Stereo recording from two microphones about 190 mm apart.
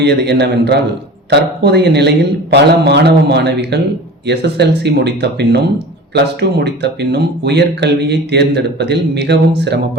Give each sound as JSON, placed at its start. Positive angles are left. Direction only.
{"t": 0.0, "sound": "speech", "side_deg": -60}